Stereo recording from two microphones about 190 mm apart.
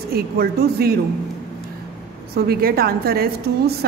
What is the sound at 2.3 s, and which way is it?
Speech, 55° right (ahead or behind).